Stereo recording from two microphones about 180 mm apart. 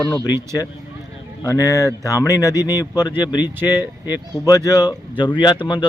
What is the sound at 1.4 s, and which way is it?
Speech, 15° left (ahead or behind).